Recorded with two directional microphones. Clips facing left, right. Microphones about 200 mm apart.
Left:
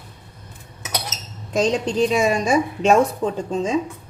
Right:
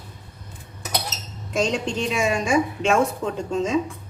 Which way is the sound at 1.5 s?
35° left (ahead or behind).